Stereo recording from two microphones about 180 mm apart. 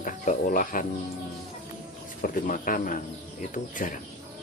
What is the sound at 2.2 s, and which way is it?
Speech, 50° left (ahead or behind).